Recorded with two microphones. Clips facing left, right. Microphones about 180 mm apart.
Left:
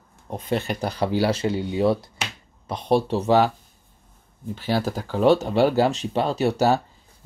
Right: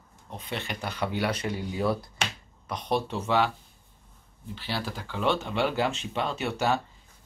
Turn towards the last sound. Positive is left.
turn(degrees=40)  # may be behind; listen again after turning